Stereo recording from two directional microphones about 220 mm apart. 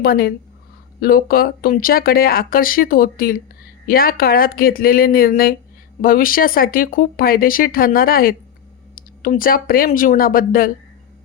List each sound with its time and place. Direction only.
0.0 s speech: 45° left (ahead or behind)